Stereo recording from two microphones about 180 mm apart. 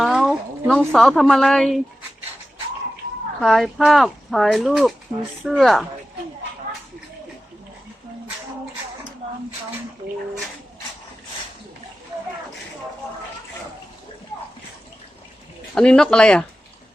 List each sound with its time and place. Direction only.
0.0 s a woman's voice: centre (ahead or behind)
3.4 s speech: centre (ahead or behind)
15.7 s speech: 5° left (ahead or behind)